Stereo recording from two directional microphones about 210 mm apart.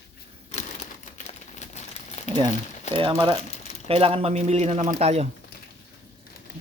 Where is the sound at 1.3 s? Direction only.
35° left (ahead or behind).